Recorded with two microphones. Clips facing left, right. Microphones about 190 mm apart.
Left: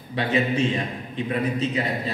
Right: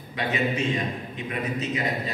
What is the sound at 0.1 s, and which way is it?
A man's voice, 30° left (ahead or behind).